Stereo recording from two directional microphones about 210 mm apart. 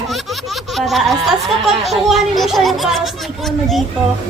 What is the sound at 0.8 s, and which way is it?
Laughter, centre (ahead or behind).